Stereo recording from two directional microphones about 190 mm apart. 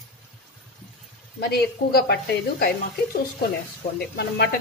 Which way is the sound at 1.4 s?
55° left (ahead or behind).